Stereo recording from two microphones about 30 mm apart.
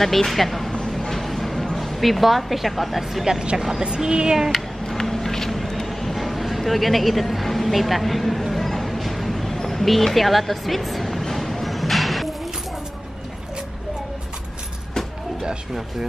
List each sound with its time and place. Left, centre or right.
0.0 s speech: centre
1.1 s a sound: centre
1.8 s a woman's voice: centre
4.0 s speech: centre
4.8 s a sound: centre
9.6 s music: centre